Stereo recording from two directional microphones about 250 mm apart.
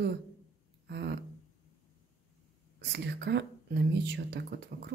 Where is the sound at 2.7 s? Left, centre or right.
Right.